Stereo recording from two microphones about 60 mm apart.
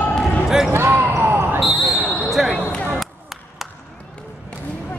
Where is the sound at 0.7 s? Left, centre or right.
Right.